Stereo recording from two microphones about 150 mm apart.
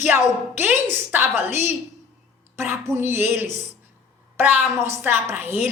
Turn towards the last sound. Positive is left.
turn(degrees=-15)  # may be behind; listen again after turning